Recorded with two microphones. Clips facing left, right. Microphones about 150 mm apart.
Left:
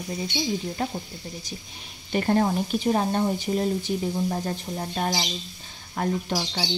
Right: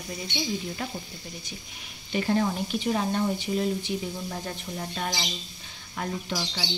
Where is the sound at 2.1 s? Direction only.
45° left (ahead or behind).